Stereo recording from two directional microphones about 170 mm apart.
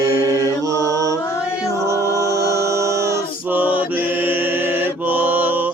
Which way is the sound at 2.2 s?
20° right (ahead or behind).